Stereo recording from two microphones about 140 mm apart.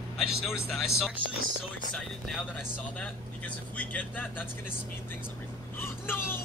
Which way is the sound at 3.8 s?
10° left (ahead or behind).